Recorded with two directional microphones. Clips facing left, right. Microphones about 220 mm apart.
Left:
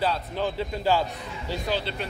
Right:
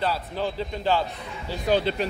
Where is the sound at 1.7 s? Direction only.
45° right (ahead or behind).